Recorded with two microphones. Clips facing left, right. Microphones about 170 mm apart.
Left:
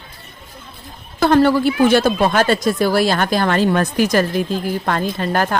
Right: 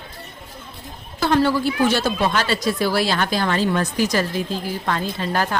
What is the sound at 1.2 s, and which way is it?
A woman's voice, 55° left (ahead or behind).